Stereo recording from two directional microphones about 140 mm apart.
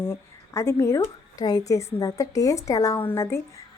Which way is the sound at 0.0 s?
20° left (ahead or behind).